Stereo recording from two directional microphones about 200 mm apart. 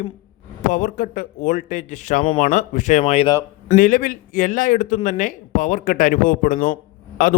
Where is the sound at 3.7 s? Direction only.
40° left (ahead or behind).